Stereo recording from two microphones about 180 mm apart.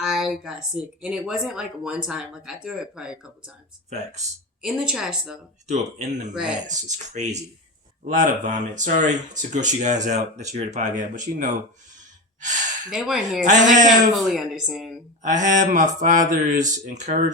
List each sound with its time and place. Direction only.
0.0 s speech: centre (ahead or behind)
3.8 s speech: 40° right (ahead or behind)
4.6 s speech: 5° right (ahead or behind)
5.6 s speech: 40° right (ahead or behind)
12.9 s speech: 5° right (ahead or behind)
13.4 s speech: 45° right (ahead or behind)
14.2 s speech: centre (ahead or behind)
15.2 s speech: 45° right (ahead or behind)